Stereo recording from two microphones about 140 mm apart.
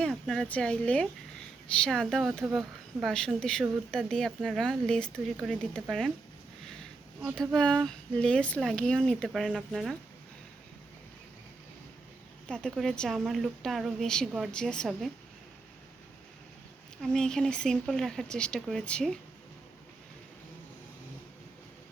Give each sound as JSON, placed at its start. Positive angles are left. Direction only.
{"t": 0.0, "sound": "a woman's voice", "side_deg": 5}
{"t": 7.3, "sound": "a woman's voice", "side_deg": 5}
{"t": 12.5, "sound": "a woman's voice", "side_deg": 5}
{"t": 17.0, "sound": "a woman's voice", "side_deg": 5}